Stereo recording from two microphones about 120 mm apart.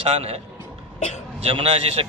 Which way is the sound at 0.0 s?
55° right (ahead or behind).